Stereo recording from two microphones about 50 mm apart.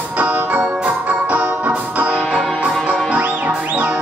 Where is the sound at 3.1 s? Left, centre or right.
Right.